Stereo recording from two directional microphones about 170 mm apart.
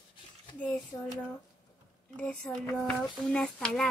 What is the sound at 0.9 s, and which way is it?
Speech, 15° left (ahead or behind).